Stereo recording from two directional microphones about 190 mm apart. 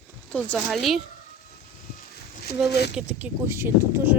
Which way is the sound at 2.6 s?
60° left (ahead or behind).